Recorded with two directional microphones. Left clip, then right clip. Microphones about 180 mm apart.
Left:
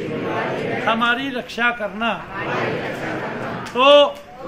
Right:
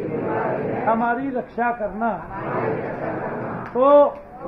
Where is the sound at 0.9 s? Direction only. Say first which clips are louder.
Left 2 dB; 70° left (ahead or behind); by 2.1 s 90° left.